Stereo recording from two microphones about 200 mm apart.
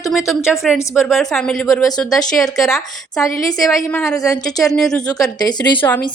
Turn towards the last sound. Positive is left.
turn(degrees=20)  # may be behind; listen again after turning